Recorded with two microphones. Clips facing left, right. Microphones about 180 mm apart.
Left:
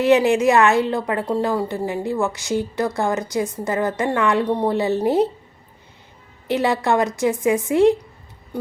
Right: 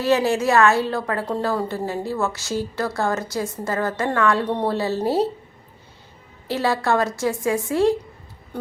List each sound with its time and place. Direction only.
0.0 s a woman's voice: 20° left (ahead or behind)
6.5 s a woman's voice: 20° left (ahead or behind)